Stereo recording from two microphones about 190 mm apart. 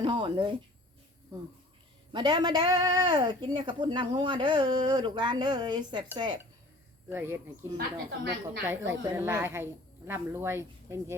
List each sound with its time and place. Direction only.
0.0 s speech: 25° right (ahead or behind)
2.1 s speech: 25° right (ahead or behind)
7.1 s speech: 10° right (ahead or behind)
7.8 s a woman's voice: 50° right (ahead or behind)
8.9 s speech: 10° right (ahead or behind)